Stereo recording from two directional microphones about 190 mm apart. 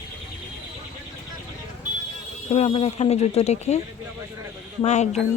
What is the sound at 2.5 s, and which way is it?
Speech, 30° left (ahead or behind).